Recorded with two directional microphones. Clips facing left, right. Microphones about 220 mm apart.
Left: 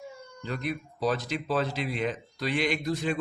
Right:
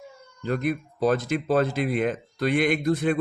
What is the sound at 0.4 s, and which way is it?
Speech, 50° right (ahead or behind).